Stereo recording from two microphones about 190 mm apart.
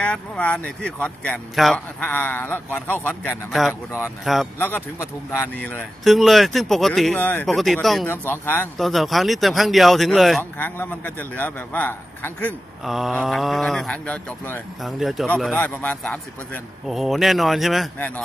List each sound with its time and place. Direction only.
0.0 s a man's voice: 5° left (ahead or behind)
4.6 s speech: 10° left (ahead or behind)
10.6 s a man's voice: 10° left (ahead or behind)